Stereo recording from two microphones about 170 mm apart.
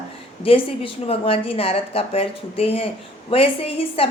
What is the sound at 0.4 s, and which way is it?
A woman's voice, 35° left (ahead or behind).